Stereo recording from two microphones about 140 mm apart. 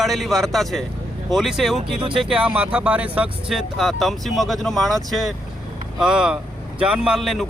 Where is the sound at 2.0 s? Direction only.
40° right (ahead or behind).